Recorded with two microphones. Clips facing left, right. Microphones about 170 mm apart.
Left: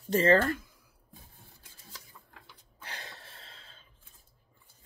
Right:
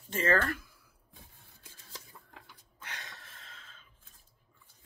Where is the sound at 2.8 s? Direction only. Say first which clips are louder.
Left 2 dB; 30° left (ahead or behind).